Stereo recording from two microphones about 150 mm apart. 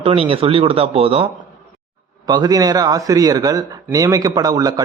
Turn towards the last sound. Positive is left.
turn(degrees=-25)  # may be behind; listen again after turning